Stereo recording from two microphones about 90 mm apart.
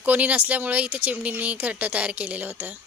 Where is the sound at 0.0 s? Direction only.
15° right (ahead or behind).